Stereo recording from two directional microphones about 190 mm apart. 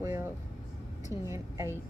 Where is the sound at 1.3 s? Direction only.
15° right (ahead or behind).